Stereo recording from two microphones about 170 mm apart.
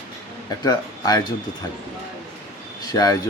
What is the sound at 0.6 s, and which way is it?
Speech, 25° left (ahead or behind).